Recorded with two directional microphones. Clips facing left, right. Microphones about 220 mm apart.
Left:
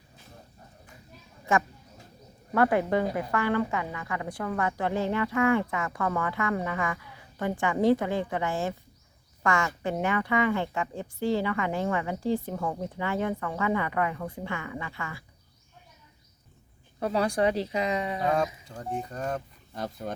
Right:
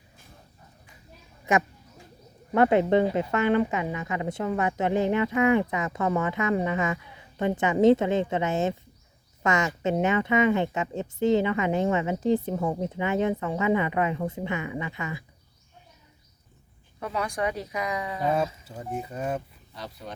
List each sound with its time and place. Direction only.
1.5 s a woman's voice: 20° right (ahead or behind)
17.0 s a woman's voice: 30° left (ahead or behind)
18.6 s speech: 5° right (ahead or behind)
19.7 s speech: 50° left (ahead or behind)